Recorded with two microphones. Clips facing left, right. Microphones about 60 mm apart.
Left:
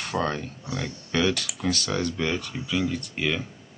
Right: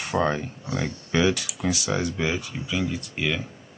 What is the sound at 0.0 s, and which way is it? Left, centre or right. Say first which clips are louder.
Speech: right 3 dB; centre.